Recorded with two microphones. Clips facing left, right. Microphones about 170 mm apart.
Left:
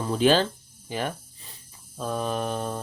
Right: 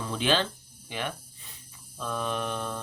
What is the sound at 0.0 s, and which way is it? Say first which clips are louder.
Speech: left 6 dB; 40° left (ahead or behind).